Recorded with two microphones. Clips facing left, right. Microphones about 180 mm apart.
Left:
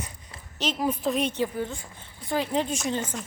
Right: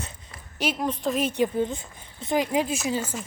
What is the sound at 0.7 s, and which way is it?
Speech, 5° left (ahead or behind).